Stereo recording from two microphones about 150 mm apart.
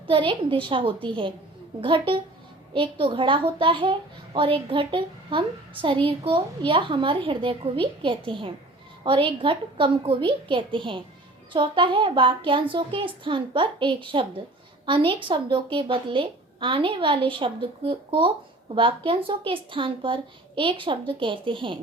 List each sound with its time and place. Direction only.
0.1 s a child's voice: 35° right (ahead or behind)